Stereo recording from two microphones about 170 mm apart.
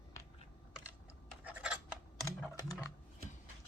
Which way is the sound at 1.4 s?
5° right (ahead or behind).